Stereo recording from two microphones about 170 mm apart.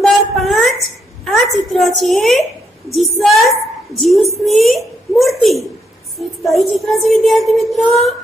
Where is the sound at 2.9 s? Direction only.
Centre (ahead or behind).